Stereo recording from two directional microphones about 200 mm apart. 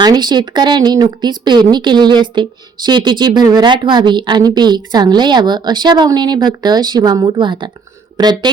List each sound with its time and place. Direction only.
0.0 s speech: 20° right (ahead or behind)